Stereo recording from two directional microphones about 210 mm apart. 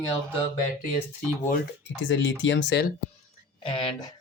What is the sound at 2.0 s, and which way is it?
Speech, 65° left (ahead or behind).